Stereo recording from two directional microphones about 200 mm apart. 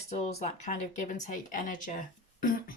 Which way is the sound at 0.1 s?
35° left (ahead or behind).